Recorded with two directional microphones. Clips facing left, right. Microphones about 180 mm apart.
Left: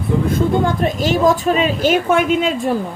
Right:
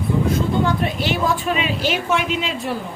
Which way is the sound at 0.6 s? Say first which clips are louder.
Left 3 dB; 40° left (ahead or behind).